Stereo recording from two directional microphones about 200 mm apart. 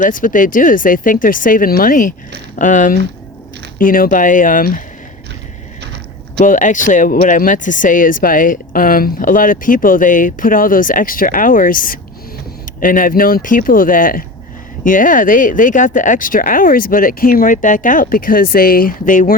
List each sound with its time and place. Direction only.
0.0 s speech: 45° left (ahead or behind)
5.8 s a sound: 55° right (ahead or behind)
6.4 s speech: 40° left (ahead or behind)